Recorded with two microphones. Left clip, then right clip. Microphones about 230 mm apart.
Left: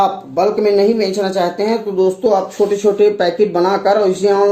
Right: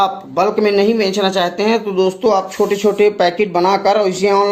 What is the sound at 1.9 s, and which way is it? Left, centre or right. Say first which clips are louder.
Speech: even; right.